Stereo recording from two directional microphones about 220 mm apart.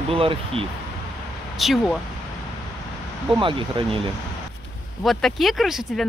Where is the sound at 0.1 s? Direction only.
25° right (ahead or behind).